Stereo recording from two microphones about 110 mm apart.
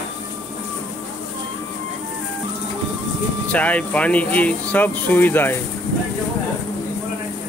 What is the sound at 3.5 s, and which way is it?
Speech, 10° left (ahead or behind).